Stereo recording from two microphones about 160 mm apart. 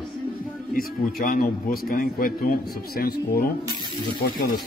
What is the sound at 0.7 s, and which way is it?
A man's voice, 65° left (ahead or behind).